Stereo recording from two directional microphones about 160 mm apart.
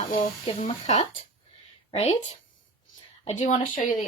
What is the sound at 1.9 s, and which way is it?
Speech, 40° left (ahead or behind).